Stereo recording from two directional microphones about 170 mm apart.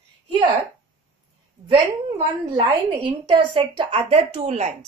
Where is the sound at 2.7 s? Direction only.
30° right (ahead or behind).